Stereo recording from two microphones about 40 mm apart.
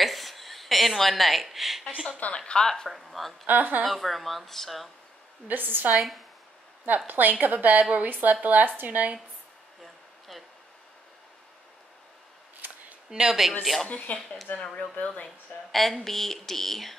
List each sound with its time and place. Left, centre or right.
0.0 s a sound: centre
2.3 s speech: left
2.6 s speech: centre
2.9 s speech: centre
3.4 s speech: right
3.8 s speech: centre
5.5 s a woman's voice: right
5.9 s speech: centre
7.1 s a woman's voice: right
13.1 s a woman's voice: centre
13.4 s speech: centre
13.8 s speech: left
14.6 s speech: left
15.2 s speech: centre